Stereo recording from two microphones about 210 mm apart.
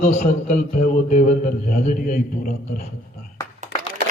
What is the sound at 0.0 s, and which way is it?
A man's voice, 35° left (ahead or behind).